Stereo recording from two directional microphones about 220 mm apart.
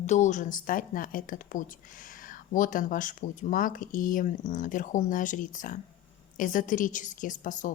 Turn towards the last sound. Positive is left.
turn(degrees=35)  # may be behind; listen again after turning